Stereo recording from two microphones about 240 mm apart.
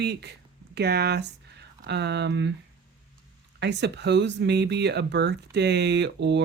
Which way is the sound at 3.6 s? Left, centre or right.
Right.